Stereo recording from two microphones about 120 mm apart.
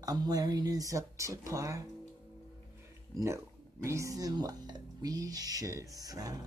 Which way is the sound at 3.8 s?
25° right (ahead or behind).